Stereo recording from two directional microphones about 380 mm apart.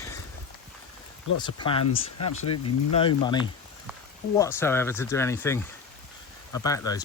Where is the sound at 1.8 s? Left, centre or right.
Left.